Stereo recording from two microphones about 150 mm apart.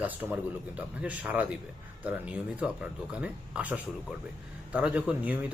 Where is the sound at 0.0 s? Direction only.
10° right (ahead or behind).